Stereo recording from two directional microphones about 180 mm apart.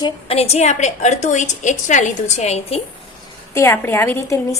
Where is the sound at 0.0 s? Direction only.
35° left (ahead or behind).